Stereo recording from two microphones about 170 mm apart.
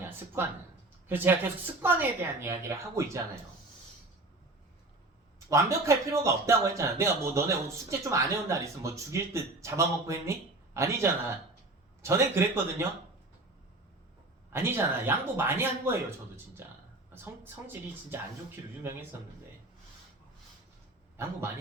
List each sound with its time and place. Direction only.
0.4 s speech: 15° right (ahead or behind)
5.5 s speech: 15° right (ahead or behind)
14.5 s speech: 15° right (ahead or behind)
17.4 s speech: 15° right (ahead or behind)